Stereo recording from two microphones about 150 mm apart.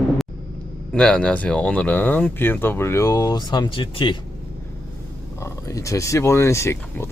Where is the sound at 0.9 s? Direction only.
5° left (ahead or behind); by 4.2 s 30° left (ahead or behind).